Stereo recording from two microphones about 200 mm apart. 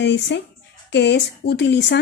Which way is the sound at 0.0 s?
60° left (ahead or behind).